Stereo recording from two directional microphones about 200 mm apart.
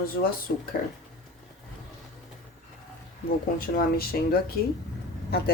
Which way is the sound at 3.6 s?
45° left (ahead or behind).